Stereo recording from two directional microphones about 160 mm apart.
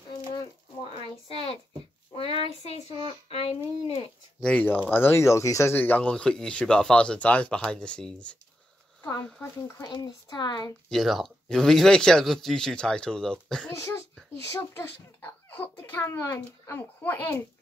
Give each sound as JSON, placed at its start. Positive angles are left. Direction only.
{"t": 0.9, "sound": "a sound", "side_deg": 35}
{"t": 2.6, "sound": "child singing", "side_deg": 35}
{"t": 3.1, "sound": "a sound", "side_deg": 40}
{"t": 4.4, "sound": "speech", "side_deg": 5}
{"t": 9.8, "sound": "speech", "side_deg": 25}
{"t": 10.9, "sound": "speech", "side_deg": 0}
{"t": 14.5, "sound": "speech", "side_deg": 15}